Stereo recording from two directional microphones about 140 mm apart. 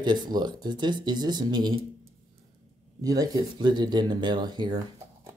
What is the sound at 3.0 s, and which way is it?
Speech, 25° right (ahead or behind).